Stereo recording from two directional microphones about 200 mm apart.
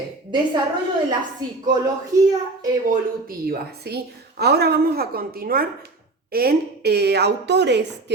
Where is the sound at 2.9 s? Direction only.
50° right (ahead or behind).